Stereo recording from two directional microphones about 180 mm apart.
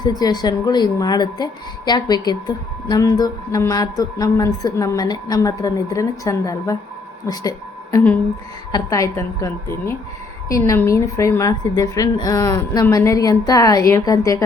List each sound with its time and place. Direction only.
0.0 s a woman's voice: 20° left (ahead or behind)